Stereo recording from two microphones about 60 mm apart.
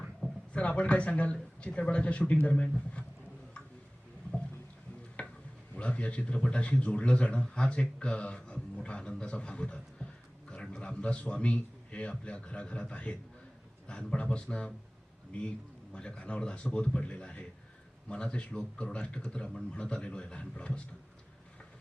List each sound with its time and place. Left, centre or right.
0.5 s a man's voice: left
5.2 s a sound: left
5.7 s a man's voice: centre